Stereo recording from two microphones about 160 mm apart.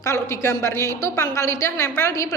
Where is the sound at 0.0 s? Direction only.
20° left (ahead or behind).